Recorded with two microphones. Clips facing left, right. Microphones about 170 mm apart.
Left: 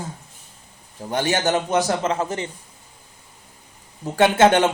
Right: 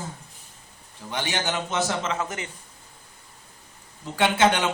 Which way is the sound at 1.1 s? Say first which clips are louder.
Left 7 dB; 45° left (ahead or behind).